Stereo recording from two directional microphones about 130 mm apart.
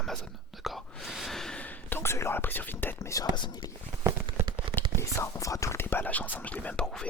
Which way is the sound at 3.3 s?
35° left (ahead or behind).